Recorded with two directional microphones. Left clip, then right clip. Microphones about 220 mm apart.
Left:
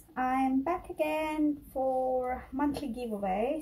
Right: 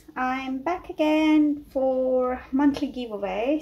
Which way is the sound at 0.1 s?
25° right (ahead or behind).